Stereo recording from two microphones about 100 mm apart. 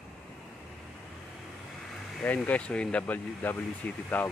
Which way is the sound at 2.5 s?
10° left (ahead or behind).